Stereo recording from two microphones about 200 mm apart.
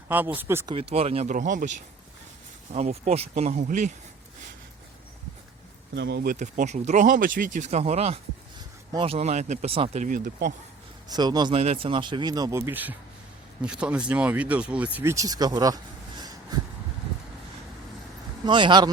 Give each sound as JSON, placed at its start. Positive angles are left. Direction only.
{"t": 0.1, "sound": "speech", "side_deg": -10}
{"t": 0.7, "sound": "speech", "side_deg": -30}
{"t": 5.9, "sound": "speech", "side_deg": -60}
{"t": 6.3, "sound": "speech", "side_deg": -35}
{"t": 11.1, "sound": "speech", "side_deg": -20}
{"t": 18.4, "sound": "speech", "side_deg": -25}